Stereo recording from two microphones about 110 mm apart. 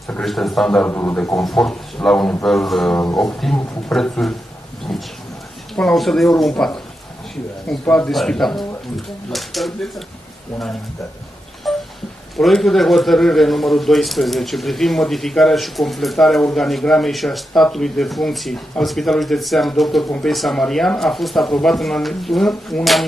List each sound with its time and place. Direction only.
0.2 s a man's voice: centre (ahead or behind)
0.8 s a man's voice: 20° left (ahead or behind)
1.4 s a man's voice: 5° left (ahead or behind)
5.8 s a man's voice: 5° left (ahead or behind)
7.8 s a man's voice: 10° left (ahead or behind)
11.6 s a sound: centre (ahead or behind)
12.4 s a man's voice: 5° left (ahead or behind)